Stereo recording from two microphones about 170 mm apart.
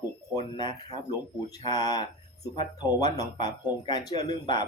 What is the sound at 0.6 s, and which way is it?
Speech, 25° left (ahead or behind).